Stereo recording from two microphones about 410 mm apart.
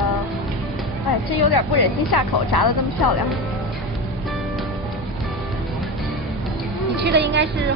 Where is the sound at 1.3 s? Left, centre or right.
Left.